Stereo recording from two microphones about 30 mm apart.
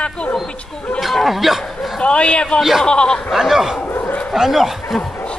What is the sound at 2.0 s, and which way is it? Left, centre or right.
Speech, left.